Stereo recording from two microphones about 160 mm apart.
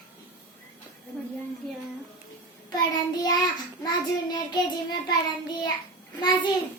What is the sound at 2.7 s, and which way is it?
Child singing, 25° left (ahead or behind).